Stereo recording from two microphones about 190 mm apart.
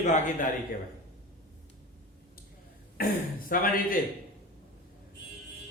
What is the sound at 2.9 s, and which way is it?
Speech, 50° left (ahead or behind).